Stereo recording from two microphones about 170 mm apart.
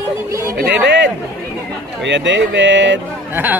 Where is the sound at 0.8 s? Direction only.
90° right.